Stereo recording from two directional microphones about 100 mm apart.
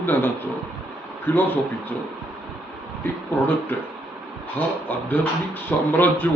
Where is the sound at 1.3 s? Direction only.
20° left (ahead or behind).